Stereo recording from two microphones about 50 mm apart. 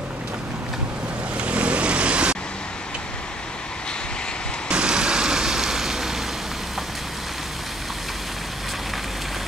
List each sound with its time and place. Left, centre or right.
1.4 s vehicle: right
4.6 s vehicle: centre